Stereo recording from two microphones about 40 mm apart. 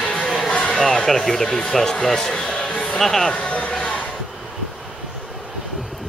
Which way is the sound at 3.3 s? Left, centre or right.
Left.